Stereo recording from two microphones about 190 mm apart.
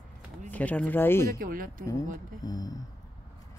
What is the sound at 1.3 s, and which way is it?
Speech, 50° right (ahead or behind).